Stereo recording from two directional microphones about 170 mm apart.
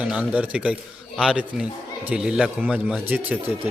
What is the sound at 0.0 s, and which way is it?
A man's voice, 5° right (ahead or behind).